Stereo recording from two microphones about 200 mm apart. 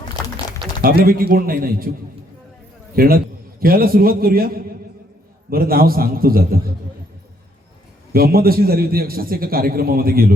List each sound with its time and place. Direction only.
0.8 s a man's voice: 50° right (ahead or behind)
2.9 s a man's voice: 45° right (ahead or behind)
8.1 s a man's voice: 50° right (ahead or behind)